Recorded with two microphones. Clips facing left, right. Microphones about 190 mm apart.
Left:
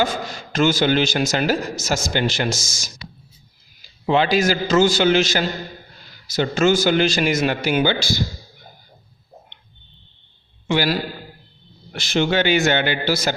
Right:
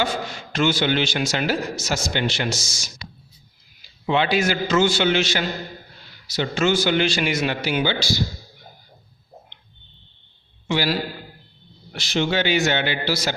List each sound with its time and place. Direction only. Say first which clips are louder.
0.0 s a man's voice: left 2 dB; 40° left (ahead or behind)
10.7 s a man's voice: left 2 dB; 50° left (ahead or behind)